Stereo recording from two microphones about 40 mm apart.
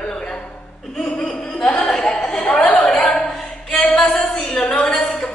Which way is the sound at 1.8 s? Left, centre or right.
Left.